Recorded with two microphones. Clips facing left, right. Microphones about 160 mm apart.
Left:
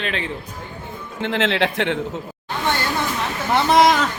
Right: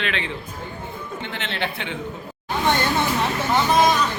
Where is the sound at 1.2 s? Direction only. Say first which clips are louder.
Left 10 dB; 90° left.